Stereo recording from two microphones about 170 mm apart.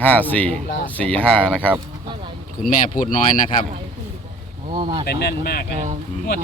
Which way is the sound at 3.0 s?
55° left (ahead or behind).